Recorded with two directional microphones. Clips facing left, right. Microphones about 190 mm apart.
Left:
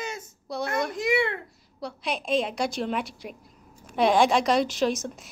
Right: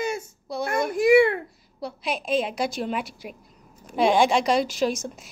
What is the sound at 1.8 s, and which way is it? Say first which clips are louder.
A woman's voice: right 2 dB; centre (ahead or behind).